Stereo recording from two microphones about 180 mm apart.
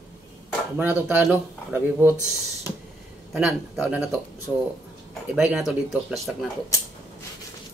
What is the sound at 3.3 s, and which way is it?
Speech, 5° right (ahead or behind).